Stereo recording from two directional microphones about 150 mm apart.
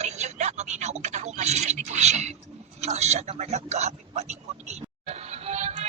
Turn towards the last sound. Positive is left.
turn(degrees=-45)  # may be behind; listen again after turning